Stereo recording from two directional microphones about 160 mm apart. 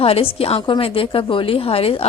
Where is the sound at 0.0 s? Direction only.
35° left (ahead or behind).